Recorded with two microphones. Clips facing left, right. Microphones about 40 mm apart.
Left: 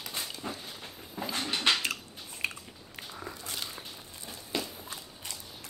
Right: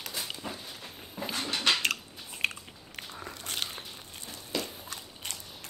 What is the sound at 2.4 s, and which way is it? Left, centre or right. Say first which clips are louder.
Biting: right 3 dB; right.